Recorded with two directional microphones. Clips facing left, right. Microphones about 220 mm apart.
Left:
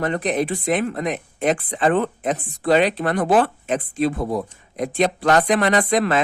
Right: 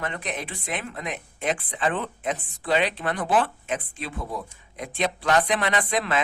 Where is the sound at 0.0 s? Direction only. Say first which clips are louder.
Left 10 dB; 40° left (ahead or behind).